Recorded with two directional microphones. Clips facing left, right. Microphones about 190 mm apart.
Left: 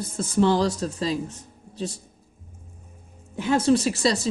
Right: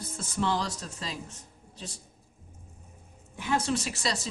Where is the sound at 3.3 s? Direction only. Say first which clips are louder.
Left 9 dB; 30° left (ahead or behind).